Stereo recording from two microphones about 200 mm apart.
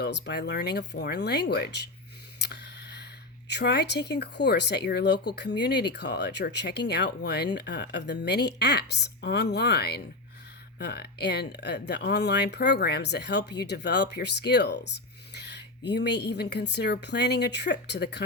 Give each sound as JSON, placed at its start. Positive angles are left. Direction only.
{"t": 0.0, "sound": "speech", "side_deg": 60}
{"t": 2.4, "sound": "a sound", "side_deg": 55}
{"t": 3.5, "sound": "speech", "side_deg": 60}